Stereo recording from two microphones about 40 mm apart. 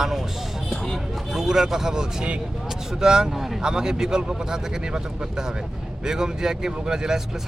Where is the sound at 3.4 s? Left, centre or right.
Centre.